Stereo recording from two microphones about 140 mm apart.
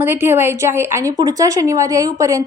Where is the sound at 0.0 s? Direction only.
15° right (ahead or behind).